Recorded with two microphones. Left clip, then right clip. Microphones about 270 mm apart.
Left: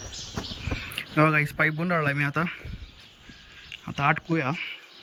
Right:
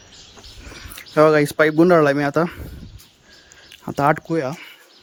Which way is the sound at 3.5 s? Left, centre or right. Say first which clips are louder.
Right 6 dB; right.